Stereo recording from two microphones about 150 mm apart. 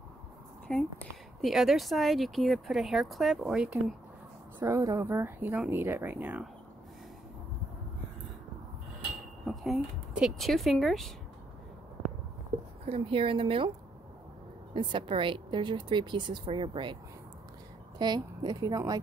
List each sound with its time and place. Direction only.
0.7 s speech: 5° left (ahead or behind)
4.6 s speech: 20° right (ahead or behind)
9.5 s speech: centre (ahead or behind)
12.8 s speech: 40° right (ahead or behind)
14.7 s a woman's voice: 35° right (ahead or behind)